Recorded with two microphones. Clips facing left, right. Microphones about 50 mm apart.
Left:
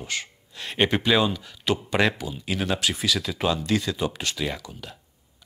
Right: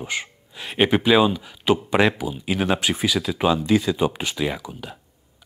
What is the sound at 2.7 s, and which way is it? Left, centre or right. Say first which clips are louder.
Speech: right 2 dB; right.